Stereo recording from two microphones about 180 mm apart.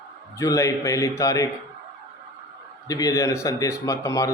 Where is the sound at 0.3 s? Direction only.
15° left (ahead or behind).